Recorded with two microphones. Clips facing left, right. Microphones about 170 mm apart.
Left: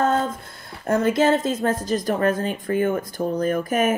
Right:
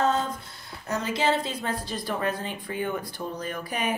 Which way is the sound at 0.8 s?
50° left (ahead or behind).